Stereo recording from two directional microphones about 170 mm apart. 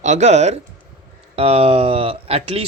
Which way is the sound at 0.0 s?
40° right (ahead or behind).